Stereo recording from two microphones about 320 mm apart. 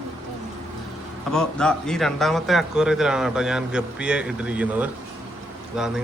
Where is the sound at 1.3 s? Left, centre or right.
Centre.